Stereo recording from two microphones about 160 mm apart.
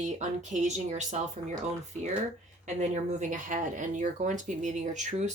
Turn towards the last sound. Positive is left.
turn(degrees=-50)  # may be behind; listen again after turning